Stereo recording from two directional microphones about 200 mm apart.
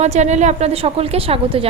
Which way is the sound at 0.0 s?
35° right (ahead or behind).